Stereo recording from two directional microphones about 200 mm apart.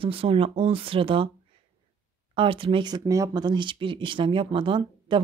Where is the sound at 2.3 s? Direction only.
25° right (ahead or behind).